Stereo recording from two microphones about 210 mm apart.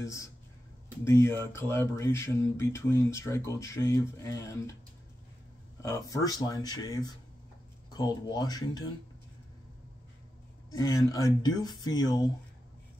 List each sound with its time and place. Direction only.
0.0 s speech: 15° left (ahead or behind)
5.8 s speech: 15° left (ahead or behind)
10.7 s speech: 15° left (ahead or behind)